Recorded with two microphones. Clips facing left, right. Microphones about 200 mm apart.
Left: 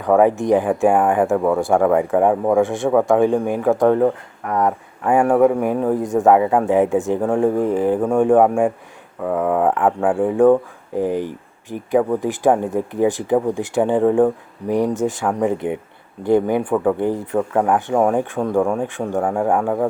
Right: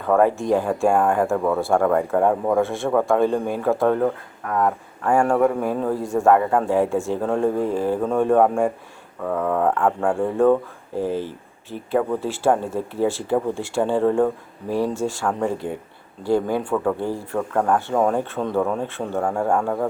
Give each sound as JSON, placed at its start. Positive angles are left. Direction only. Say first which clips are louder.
{"t": 0.0, "sound": "speech", "louder": "left 3 dB", "side_deg": 15}